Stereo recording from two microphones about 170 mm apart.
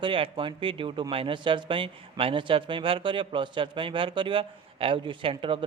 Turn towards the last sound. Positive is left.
turn(degrees=-30)  # may be behind; listen again after turning